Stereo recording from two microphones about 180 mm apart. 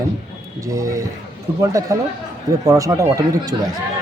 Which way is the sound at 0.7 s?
15° right (ahead or behind).